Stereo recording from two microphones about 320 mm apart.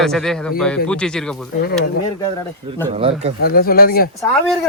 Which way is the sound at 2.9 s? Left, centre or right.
Centre.